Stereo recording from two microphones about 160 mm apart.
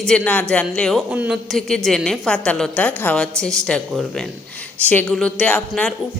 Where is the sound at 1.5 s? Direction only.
Centre (ahead or behind).